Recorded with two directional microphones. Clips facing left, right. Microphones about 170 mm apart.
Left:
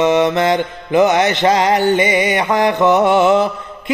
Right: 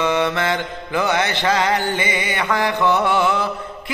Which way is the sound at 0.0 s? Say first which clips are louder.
Left 6 dB; 20° left (ahead or behind).